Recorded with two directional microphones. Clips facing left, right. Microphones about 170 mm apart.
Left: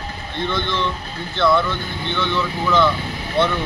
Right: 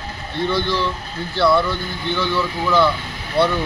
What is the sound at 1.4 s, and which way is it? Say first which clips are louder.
Speech: right 1 dB; 5° right (ahead or behind).